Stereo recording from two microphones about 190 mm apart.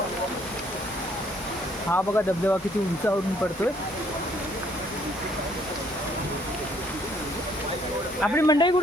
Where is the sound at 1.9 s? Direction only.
10° left (ahead or behind).